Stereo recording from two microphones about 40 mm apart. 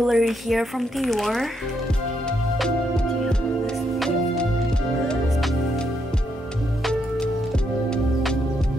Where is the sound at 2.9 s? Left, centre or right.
Centre.